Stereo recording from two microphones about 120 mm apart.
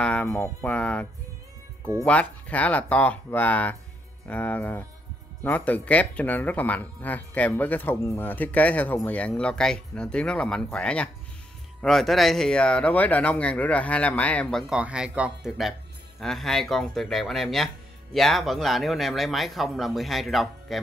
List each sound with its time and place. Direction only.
0.0 s speech: 10° left (ahead or behind)
0.3 s speech: 20° left (ahead or behind)
0.7 s speech: 10° left (ahead or behind)
2.0 s speech: 10° left (ahead or behind)
14.7 s speech: 10° right (ahead or behind)
16.2 s speech: centre (ahead or behind)